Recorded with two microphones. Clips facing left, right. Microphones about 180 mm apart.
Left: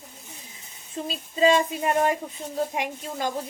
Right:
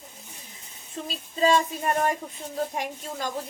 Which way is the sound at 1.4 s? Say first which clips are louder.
Left 2 dB; 15° left (ahead or behind).